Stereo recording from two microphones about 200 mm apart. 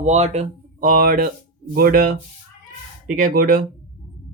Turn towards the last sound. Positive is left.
turn(degrees=-45)  # may be behind; listen again after turning